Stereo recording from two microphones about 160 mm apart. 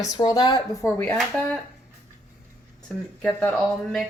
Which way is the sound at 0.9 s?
15° left (ahead or behind).